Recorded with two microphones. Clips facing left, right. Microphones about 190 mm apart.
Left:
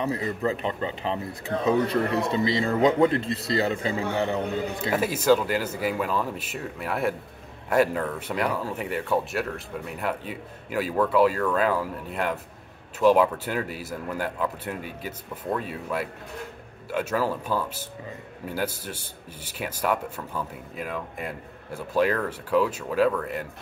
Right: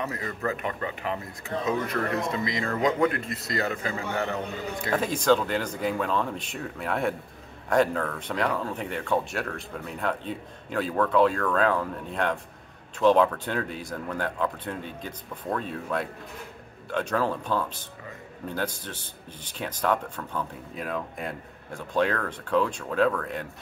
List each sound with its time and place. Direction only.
0.0 s a man's voice: 25° left (ahead or behind)
4.9 s speech: 5° left (ahead or behind)